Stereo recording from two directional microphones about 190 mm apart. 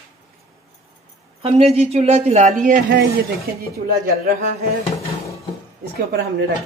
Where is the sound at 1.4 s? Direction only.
30° right (ahead or behind).